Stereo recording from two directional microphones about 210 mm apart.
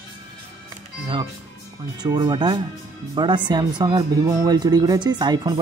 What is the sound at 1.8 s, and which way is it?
Speech, 20° right (ahead or behind).